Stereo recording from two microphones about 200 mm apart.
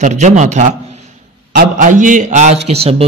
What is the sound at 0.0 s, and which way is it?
A man's voice, 35° right (ahead or behind).